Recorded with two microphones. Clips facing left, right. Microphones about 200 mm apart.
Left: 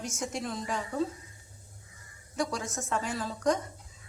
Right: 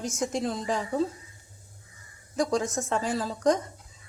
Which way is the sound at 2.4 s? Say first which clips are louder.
Right 6 dB; 35° right (ahead or behind).